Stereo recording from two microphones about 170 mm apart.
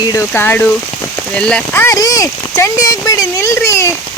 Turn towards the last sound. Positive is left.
turn(degrees=15)  # may be behind; listen again after turning